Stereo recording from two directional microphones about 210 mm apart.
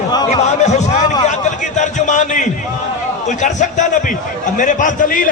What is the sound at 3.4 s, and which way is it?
A man's voice, 35° left (ahead or behind).